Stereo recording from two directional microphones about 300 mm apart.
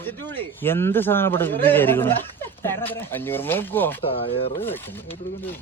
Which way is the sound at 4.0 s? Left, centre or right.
Centre.